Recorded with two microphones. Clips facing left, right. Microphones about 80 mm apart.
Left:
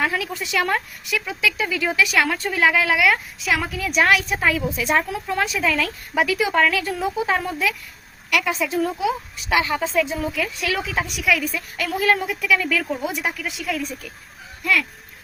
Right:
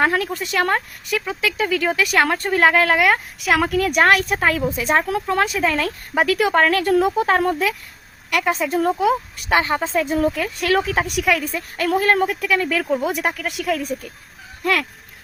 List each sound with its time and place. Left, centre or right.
0.0 s a woman's voice: right
5.0 s speech: right
11.3 s a woman's voice: right